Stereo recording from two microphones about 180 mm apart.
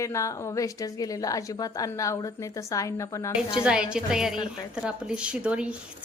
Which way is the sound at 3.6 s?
5° right (ahead or behind).